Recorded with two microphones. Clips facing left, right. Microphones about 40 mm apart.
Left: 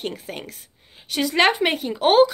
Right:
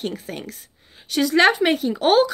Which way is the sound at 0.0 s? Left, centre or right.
Left.